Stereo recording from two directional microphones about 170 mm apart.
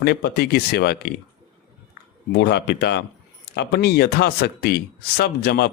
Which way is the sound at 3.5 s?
70° left (ahead or behind).